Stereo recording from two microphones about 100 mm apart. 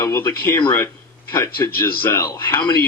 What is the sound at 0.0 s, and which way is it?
A man's voice, 25° left (ahead or behind).